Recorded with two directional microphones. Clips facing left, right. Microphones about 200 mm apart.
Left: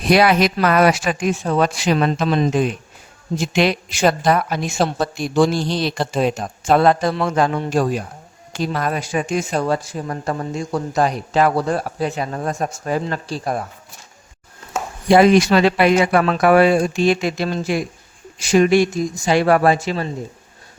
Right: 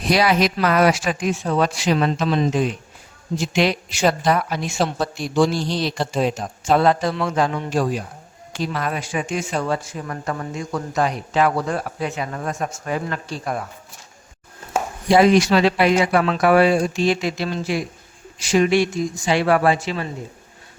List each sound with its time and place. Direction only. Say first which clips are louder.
0.1 s a woman's voice: left 3 dB; 60° left (ahead or behind)
7.1 s speech: left 3 dB; 40° left (ahead or behind)
15.1 s speech: left 2 dB; 55° left (ahead or behind)